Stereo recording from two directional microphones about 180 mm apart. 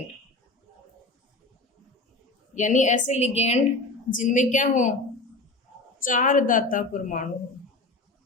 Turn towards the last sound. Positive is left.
turn(degrees=45)  # may be behind; listen again after turning